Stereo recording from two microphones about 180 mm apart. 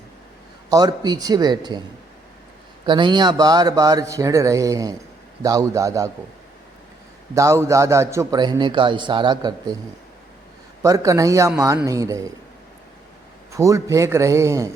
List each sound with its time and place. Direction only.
0.7 s a man's voice: 20° right (ahead or behind)
2.8 s a man's voice: 25° right (ahead or behind)
7.3 s a man's voice: 15° right (ahead or behind)
10.8 s a man's voice: 20° right (ahead or behind)
13.5 s a man's voice: 15° right (ahead or behind)